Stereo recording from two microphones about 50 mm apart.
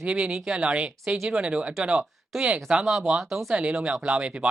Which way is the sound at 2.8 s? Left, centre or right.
Centre.